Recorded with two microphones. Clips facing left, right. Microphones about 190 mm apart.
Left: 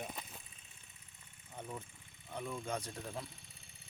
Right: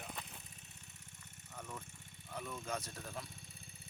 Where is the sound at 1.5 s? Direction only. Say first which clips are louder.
Left 3 dB; 20° left (ahead or behind).